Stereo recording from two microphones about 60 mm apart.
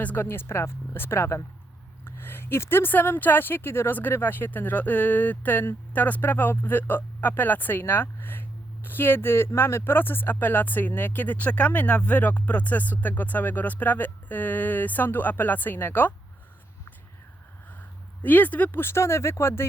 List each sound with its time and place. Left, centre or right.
0.0 s speech: left
0.3 s speech: left
18.2 s speech: left
18.8 s speech: left